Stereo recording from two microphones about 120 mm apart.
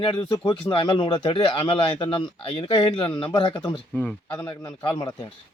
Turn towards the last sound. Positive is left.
turn(degrees=35)  # may be behind; listen again after turning